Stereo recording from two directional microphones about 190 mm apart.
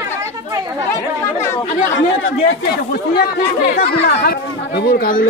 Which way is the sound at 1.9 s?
80° left.